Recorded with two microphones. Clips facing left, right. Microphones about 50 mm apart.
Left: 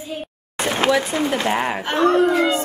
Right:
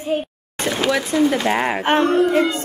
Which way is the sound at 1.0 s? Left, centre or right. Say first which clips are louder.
Right 4 dB; left.